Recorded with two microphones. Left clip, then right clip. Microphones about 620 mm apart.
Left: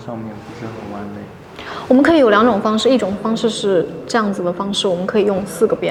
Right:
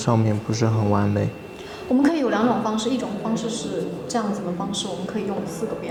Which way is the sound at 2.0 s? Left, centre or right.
Left.